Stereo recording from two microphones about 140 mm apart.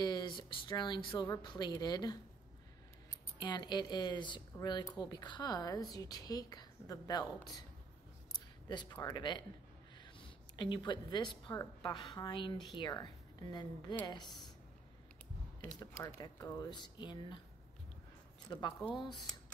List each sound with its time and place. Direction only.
0.0 s a woman's voice: 30° left (ahead or behind)
8.3 s a sound: 30° left (ahead or behind)
9.0 s a woman's voice: 30° left (ahead or behind)
16.2 s a woman's voice: 30° left (ahead or behind)
18.5 s a woman's voice: 35° left (ahead or behind)
19.3 s a sound: 5° left (ahead or behind)